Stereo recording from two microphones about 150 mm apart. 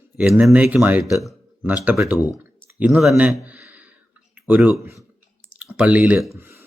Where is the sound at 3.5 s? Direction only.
10° right (ahead or behind).